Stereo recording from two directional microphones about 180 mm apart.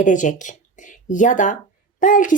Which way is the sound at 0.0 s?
45° left (ahead or behind).